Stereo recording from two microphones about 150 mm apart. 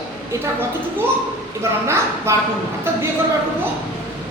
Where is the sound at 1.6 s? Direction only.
20° right (ahead or behind).